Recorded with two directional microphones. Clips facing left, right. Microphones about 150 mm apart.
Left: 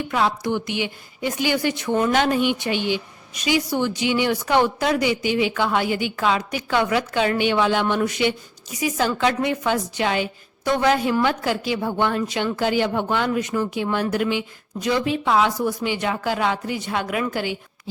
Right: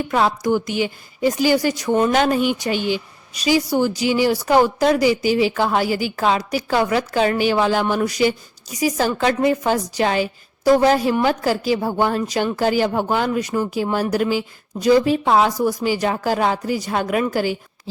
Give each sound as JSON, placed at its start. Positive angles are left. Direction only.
{"t": 0.4, "sound": "a woman's voice", "side_deg": -40}
{"t": 1.9, "sound": "speech", "side_deg": -20}
{"t": 2.2, "sound": "a woman's voice", "side_deg": -40}